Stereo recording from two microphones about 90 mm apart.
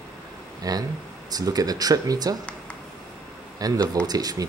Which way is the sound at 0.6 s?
45° right (ahead or behind).